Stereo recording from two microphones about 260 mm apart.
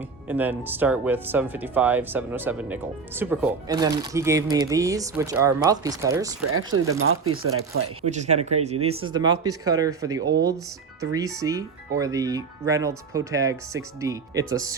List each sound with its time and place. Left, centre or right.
0.3 s speech: centre
6.7 s speech: right
8.0 s speech: right